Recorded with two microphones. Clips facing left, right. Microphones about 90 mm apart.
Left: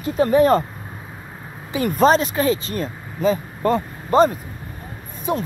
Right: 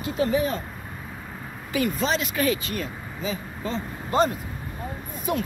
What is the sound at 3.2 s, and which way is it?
Speech, 55° left (ahead or behind).